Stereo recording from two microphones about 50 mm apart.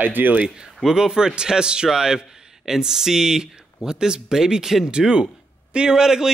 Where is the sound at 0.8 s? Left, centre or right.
Centre.